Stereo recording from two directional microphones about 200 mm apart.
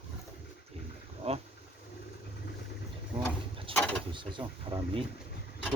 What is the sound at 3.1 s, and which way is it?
Vehicle, 25° right (ahead or behind).